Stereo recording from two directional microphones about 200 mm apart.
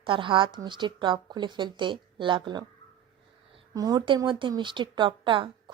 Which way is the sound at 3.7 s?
20° right (ahead or behind).